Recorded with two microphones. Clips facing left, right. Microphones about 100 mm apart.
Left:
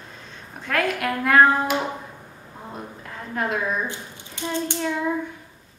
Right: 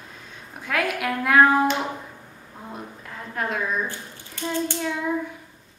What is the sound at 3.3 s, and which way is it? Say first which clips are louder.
Speech: left 2 dB; centre (ahead or behind).